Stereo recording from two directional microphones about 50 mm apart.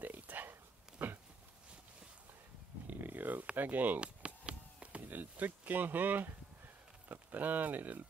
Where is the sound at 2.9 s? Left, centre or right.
Right.